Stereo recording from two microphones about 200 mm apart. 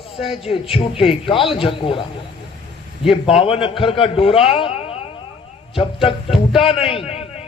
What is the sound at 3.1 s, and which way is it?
Speech, 25° left (ahead or behind).